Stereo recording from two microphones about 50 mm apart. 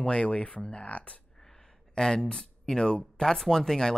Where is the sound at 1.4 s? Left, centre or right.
Centre.